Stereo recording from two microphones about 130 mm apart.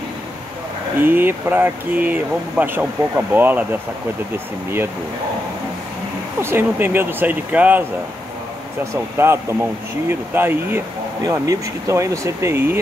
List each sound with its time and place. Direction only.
1.0 s speech: 15° right (ahead or behind)
6.4 s speech: 15° right (ahead or behind)
8.9 s speech: 20° right (ahead or behind)